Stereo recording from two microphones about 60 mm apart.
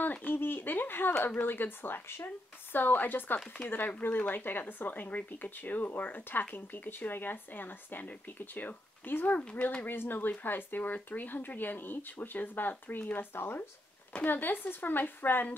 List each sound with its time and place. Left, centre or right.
0.0 s speech: left
9.4 s speech: centre
9.8 s speech: left